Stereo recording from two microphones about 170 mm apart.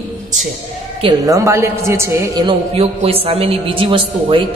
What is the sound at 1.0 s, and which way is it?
A woman's voice, 20° right (ahead or behind).